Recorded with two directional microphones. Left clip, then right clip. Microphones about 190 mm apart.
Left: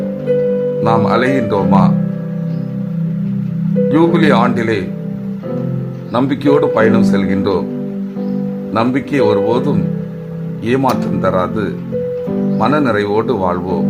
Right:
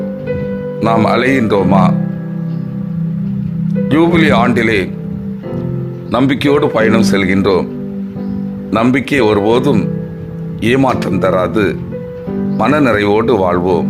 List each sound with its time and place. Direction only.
0.8 s speech: 25° right (ahead or behind)
3.8 s speech: 25° right (ahead or behind)
6.1 s speech: 25° right (ahead or behind)
8.7 s speech: 30° right (ahead or behind)